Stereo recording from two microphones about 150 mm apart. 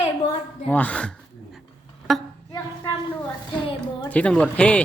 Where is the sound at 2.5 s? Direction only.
20° left (ahead or behind).